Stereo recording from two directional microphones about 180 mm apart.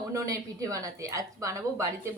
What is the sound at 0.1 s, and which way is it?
A woman's voice, 15° right (ahead or behind).